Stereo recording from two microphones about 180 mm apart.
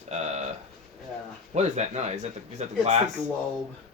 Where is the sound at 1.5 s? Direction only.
40° right (ahead or behind).